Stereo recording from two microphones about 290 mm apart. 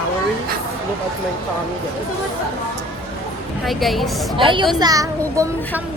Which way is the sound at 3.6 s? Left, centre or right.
Centre.